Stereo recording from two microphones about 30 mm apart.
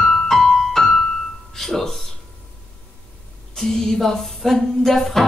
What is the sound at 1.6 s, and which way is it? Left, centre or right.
Music, centre.